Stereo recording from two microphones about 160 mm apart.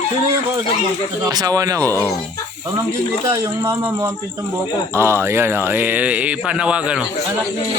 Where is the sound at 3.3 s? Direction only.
15° right (ahead or behind).